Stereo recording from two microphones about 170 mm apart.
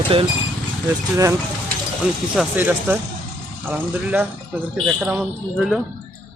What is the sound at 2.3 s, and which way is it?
Speech, 5° right (ahead or behind).